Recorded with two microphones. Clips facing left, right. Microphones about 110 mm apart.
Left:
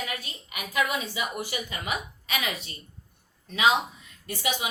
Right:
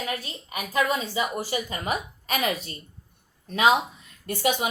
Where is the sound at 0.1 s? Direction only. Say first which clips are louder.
Right 5 dB; 35° right (ahead or behind).